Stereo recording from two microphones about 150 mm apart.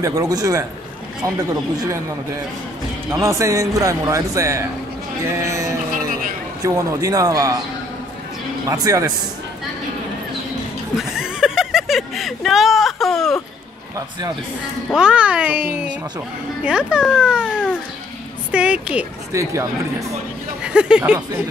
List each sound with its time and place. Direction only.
0.0 s a man's voice: 20° right (ahead or behind)
3.1 s a man's voice: 20° right (ahead or behind)
8.6 s a man's voice: 20° right (ahead or behind)
11.0 s a sound: 5° right (ahead or behind)
14.9 s a child's voice: 5° right (ahead or behind)
17.5 s speech: 10° left (ahead or behind)
18.5 s speech: 5° right (ahead or behind)
19.3 s a man's voice: 20° right (ahead or behind)
20.6 s speech: 5° right (ahead or behind)